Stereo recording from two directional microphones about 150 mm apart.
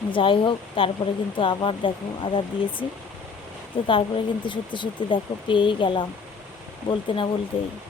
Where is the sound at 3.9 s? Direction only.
35° left (ahead or behind).